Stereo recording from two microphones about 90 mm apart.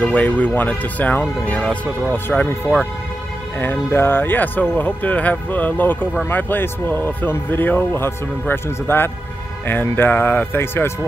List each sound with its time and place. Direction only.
0.0 s speech: 15° left (ahead or behind)